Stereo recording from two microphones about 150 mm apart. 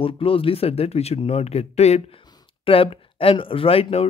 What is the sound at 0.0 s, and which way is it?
Speech, 40° left (ahead or behind).